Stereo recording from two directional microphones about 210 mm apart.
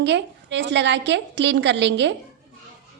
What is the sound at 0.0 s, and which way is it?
A woman's voice, 55° right (ahead or behind).